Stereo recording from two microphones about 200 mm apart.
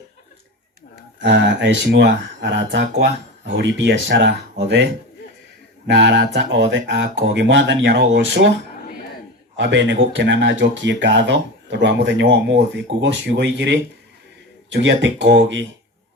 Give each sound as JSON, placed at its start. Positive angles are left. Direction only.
{"t": 1.2, "sound": "speech", "side_deg": -65}
{"t": 5.9, "sound": "speech", "side_deg": -65}
{"t": 9.6, "sound": "speech", "side_deg": -60}